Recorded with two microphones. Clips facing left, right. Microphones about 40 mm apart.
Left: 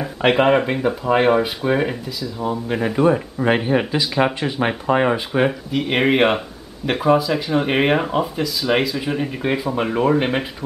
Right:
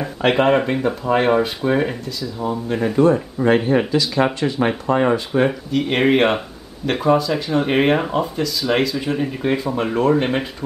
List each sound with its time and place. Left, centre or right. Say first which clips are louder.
0.2 s speech: even; centre
5.5 s speech: right 1 dB; centre